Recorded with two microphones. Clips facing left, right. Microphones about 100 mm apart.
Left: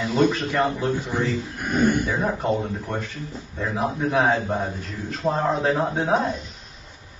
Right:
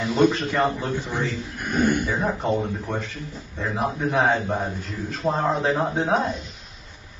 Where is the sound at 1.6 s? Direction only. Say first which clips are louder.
Even; 40° left (ahead or behind).